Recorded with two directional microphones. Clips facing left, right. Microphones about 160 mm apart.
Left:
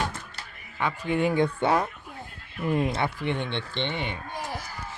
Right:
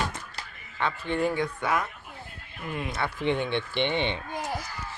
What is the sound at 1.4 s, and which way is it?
Speech, 30° left (ahead or behind).